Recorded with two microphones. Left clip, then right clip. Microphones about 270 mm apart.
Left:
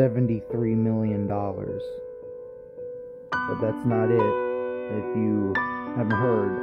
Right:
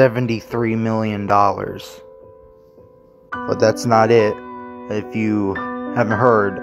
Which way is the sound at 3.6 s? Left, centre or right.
Centre.